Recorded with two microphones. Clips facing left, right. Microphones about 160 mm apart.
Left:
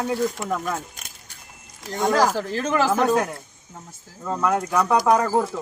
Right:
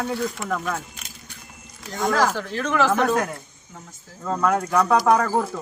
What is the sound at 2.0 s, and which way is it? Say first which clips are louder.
Speech: left 2 dB; 25° left (ahead or behind).